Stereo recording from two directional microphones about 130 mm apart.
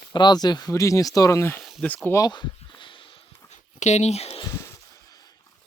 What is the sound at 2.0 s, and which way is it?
Speech, 25° left (ahead or behind).